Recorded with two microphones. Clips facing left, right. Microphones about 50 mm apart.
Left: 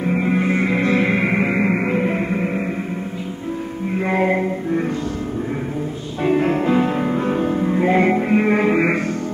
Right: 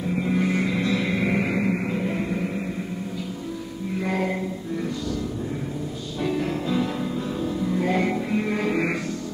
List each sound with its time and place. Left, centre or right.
0.0 s music: left
3.9 s music: left
6.2 s music: left